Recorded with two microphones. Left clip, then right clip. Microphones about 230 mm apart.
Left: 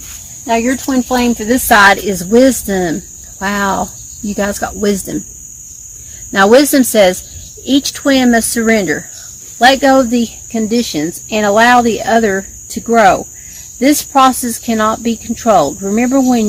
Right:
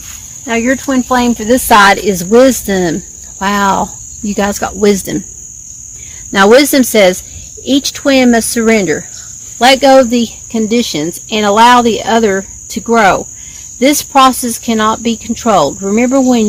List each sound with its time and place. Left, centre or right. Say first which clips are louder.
0.4 s speech: right 1 dB; right
6.3 s speech: right 2 dB; right